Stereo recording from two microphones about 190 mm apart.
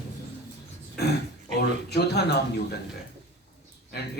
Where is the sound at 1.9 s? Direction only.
60° left (ahead or behind).